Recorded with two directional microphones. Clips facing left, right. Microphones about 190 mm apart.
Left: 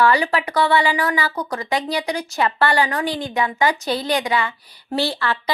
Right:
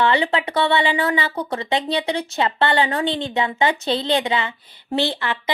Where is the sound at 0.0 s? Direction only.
25° right (ahead or behind).